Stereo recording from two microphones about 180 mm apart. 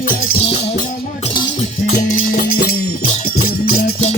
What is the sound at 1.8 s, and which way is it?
Music, 50° left (ahead or behind).